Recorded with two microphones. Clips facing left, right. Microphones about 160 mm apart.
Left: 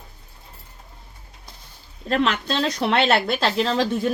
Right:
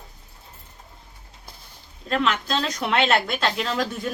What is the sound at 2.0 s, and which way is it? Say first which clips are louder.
Speech: left 2 dB; 35° left (ahead or behind).